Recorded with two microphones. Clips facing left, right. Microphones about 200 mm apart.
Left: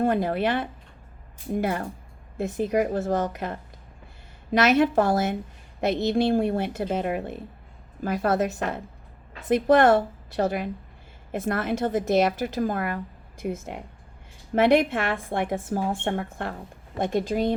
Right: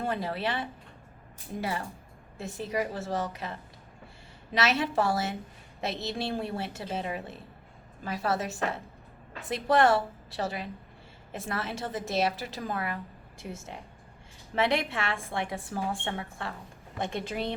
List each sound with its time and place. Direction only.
0.0 s a woman's voice: 50° left (ahead or behind)